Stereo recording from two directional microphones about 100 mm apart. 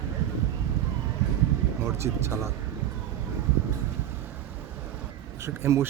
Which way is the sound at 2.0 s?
30° right (ahead or behind).